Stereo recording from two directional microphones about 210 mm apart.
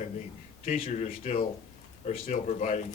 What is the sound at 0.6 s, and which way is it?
Speech, 35° left (ahead or behind).